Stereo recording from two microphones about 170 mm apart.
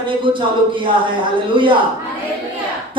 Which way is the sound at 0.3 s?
30° right (ahead or behind).